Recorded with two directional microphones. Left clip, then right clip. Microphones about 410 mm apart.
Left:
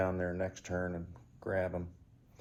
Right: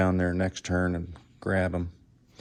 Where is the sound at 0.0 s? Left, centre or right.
Centre.